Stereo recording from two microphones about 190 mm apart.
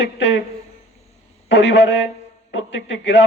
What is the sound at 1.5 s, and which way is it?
Speech, 70° left (ahead or behind).